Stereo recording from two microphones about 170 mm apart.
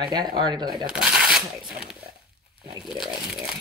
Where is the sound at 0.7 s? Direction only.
5° right (ahead or behind).